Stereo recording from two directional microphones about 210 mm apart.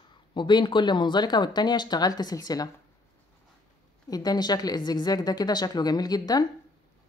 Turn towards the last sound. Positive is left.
turn(degrees=20)  # may be behind; listen again after turning